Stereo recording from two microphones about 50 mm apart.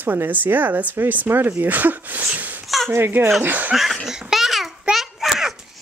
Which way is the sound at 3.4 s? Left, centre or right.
Right.